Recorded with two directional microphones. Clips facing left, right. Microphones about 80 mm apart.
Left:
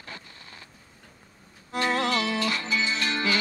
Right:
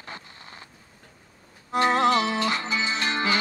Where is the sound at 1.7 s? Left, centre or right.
Right.